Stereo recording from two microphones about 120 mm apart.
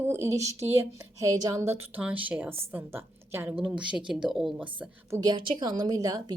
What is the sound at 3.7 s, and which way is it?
Speech, 5° right (ahead or behind).